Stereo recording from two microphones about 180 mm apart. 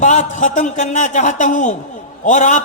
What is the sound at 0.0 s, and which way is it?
A man's voice, 45° left (ahead or behind).